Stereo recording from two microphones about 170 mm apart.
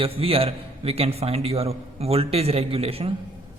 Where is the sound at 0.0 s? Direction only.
35° right (ahead or behind).